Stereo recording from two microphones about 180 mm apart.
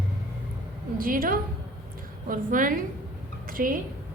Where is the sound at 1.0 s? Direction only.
50° right (ahead or behind).